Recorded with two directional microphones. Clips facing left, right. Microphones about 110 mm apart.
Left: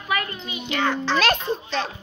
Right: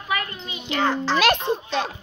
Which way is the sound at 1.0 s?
10° right (ahead or behind).